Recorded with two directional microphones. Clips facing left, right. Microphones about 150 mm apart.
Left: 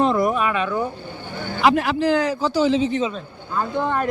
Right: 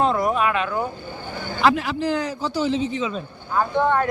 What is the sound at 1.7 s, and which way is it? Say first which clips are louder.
A man's voice: left 4 dB; 70° left (ahead or behind).